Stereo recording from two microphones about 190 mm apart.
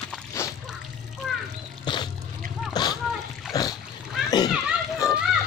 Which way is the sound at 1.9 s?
25° left (ahead or behind).